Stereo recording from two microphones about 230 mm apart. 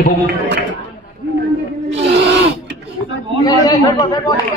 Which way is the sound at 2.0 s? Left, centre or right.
Right.